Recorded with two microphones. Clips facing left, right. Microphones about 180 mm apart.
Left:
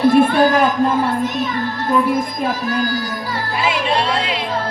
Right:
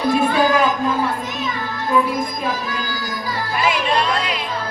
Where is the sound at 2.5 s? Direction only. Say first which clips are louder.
Left 5 dB; 50° left (ahead or behind).